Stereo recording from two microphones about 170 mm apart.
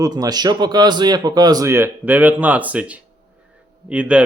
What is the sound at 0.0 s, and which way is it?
Speech, 20° right (ahead or behind).